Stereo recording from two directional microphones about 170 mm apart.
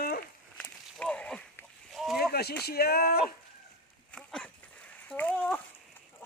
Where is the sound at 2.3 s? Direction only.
70° left (ahead or behind).